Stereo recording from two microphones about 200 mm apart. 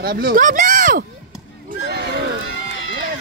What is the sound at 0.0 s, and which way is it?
Speech, 45° right (ahead or behind).